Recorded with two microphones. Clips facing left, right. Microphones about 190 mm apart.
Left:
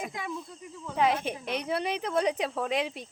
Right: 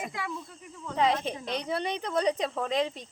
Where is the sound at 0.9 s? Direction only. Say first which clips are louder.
Even; 5° left (ahead or behind).